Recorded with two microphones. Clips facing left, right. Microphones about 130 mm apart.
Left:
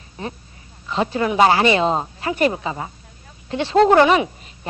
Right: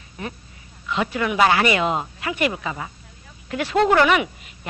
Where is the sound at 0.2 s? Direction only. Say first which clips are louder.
Left 2 dB; 30° left (ahead or behind).